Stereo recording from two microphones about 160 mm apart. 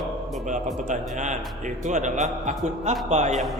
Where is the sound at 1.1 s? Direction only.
50° right (ahead or behind).